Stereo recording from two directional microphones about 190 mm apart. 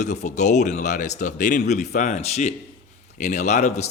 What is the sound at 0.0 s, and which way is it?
Speech, 40° left (ahead or behind).